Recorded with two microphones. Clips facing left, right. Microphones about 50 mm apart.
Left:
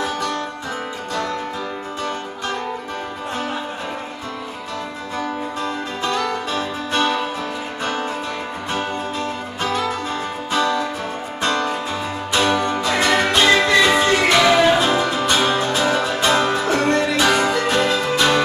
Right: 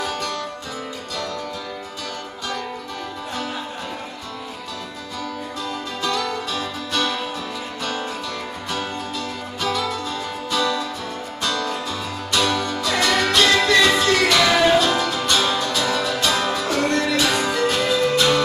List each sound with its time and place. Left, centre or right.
0.0 s music: left
5.2 s music: left